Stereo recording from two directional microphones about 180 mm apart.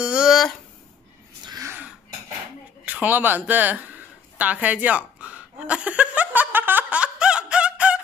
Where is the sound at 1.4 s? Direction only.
20° right (ahead or behind).